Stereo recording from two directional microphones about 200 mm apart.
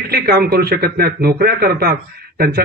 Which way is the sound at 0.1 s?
50° right (ahead or behind).